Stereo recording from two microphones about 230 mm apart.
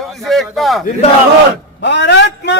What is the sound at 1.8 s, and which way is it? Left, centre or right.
Speech, left.